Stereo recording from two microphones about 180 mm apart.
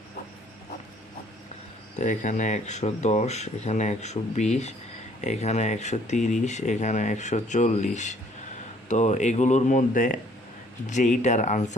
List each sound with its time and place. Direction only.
2.0 s speech: 45° left (ahead or behind)